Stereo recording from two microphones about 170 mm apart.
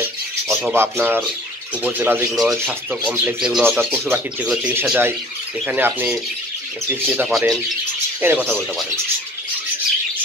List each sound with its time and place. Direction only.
0.5 s speech: 5° right (ahead or behind)
2.3 s speech: centre (ahead or behind)
7.1 s speech: centre (ahead or behind)